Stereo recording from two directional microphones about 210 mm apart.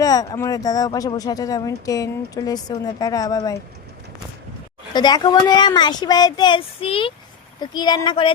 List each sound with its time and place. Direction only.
0.0 s speech: 15° left (ahead or behind)
4.9 s speech: 20° left (ahead or behind)